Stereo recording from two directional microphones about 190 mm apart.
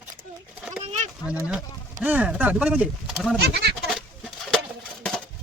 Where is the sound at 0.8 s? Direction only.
35° right (ahead or behind).